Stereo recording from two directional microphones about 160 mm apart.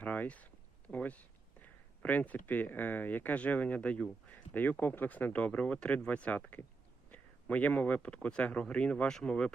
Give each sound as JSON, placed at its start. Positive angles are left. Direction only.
{"t": 0.0, "sound": "speech", "side_deg": 10}